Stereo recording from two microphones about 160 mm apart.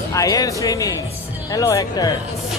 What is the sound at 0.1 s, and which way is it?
Speech, 20° left (ahead or behind).